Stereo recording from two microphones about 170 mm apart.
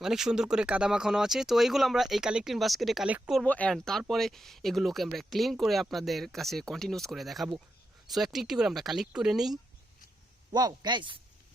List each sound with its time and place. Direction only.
0.0 s speech: 5° right (ahead or behind)
10.5 s speech: 25° right (ahead or behind)